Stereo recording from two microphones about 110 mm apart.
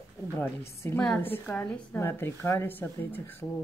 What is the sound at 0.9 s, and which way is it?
A woman's voice, 10° left (ahead or behind).